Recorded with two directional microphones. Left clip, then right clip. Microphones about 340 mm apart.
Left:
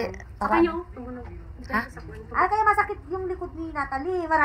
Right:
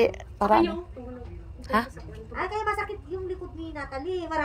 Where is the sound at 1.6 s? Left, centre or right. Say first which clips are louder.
Right 2 dB; centre.